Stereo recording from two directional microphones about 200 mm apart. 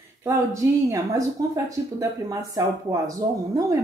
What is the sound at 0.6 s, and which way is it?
Speech, 15° right (ahead or behind).